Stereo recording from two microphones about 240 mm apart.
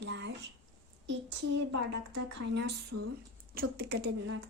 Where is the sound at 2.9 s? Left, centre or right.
Right.